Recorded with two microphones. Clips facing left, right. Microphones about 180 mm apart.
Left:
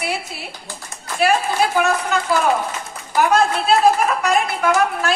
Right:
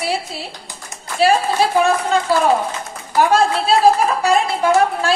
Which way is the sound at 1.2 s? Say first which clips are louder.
Right 3 dB; 30° right (ahead or behind).